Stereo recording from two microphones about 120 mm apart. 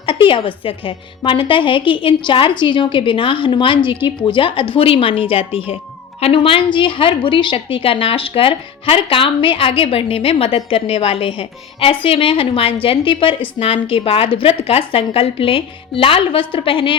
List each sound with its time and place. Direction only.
0.0 s a woman's voice: 45° left (ahead or behind)